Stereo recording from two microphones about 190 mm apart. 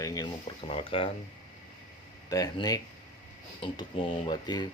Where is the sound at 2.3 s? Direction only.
20° left (ahead or behind).